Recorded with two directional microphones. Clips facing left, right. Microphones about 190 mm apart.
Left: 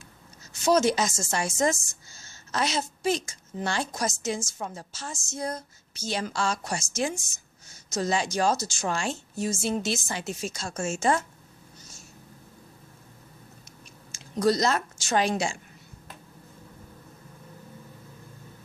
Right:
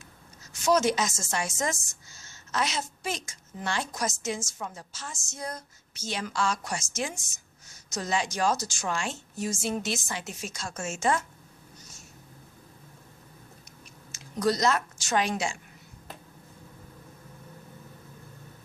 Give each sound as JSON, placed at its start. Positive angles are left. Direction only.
{"t": 0.5, "sound": "a woman's voice", "side_deg": 30}
{"t": 14.1, "sound": "a woman's voice", "side_deg": 30}